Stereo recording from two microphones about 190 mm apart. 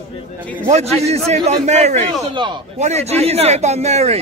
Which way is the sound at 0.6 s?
35° right (ahead or behind).